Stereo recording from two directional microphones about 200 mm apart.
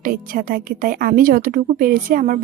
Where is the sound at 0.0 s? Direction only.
45° right (ahead or behind).